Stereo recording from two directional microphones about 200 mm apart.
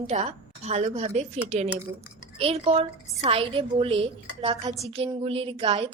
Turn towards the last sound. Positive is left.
turn(degrees=-25)  # may be behind; listen again after turning